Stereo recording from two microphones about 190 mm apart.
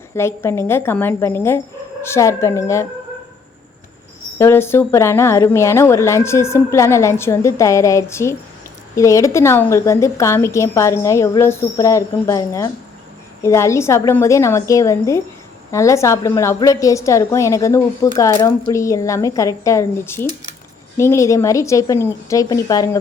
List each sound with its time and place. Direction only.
0.2 s speech: 15° left (ahead or behind)
4.4 s speech: 15° left (ahead or behind)